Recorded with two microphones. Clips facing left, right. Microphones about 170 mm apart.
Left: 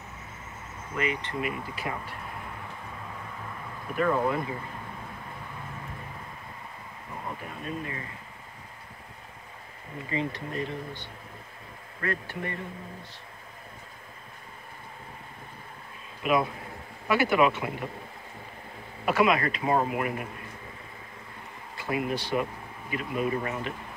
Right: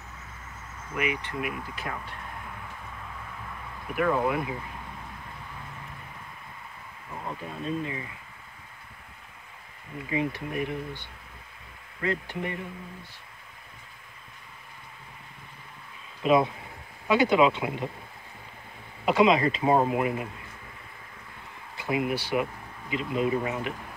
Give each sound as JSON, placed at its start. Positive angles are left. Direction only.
{"t": 0.9, "sound": "speech", "side_deg": -15}
{"t": 1.4, "sound": "speech", "side_deg": 5}
{"t": 3.9, "sound": "speech", "side_deg": -10}
{"t": 7.6, "sound": "speech", "side_deg": -20}
{"t": 10.0, "sound": "speech", "side_deg": -10}
{"t": 12.0, "sound": "speech", "side_deg": -20}
{"t": 16.2, "sound": "speech", "side_deg": -25}
{"t": 19.0, "sound": "speech", "side_deg": -20}
{"t": 21.7, "sound": "speech", "side_deg": -15}